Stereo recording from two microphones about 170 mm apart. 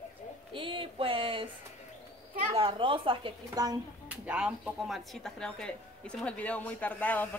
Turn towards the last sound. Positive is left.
turn(degrees=10)  # may be behind; listen again after turning